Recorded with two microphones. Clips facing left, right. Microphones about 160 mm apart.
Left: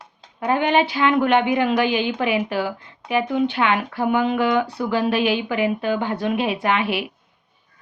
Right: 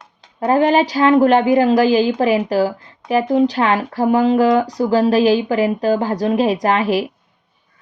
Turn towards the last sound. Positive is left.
turn(degrees=-40)  # may be behind; listen again after turning